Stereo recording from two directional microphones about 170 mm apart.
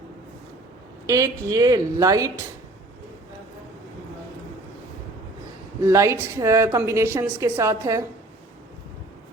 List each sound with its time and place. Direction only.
1.0 s a woman's voice: 20° right (ahead or behind)
5.8 s a woman's voice: 15° right (ahead or behind)